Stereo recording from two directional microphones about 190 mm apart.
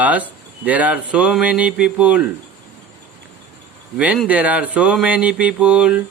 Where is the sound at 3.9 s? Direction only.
5° right (ahead or behind).